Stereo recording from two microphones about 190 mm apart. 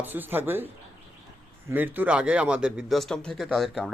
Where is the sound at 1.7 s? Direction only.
10° right (ahead or behind).